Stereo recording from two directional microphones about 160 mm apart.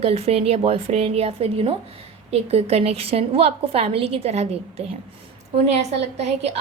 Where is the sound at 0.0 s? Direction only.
40° right (ahead or behind).